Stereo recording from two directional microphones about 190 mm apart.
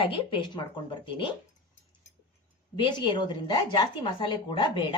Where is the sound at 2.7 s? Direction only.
25° left (ahead or behind).